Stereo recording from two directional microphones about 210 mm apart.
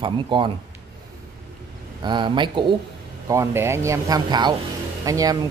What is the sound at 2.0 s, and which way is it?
A man's voice, 20° right (ahead or behind).